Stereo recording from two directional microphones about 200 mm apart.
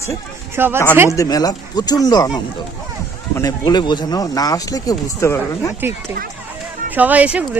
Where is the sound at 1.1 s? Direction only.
20° left (ahead or behind).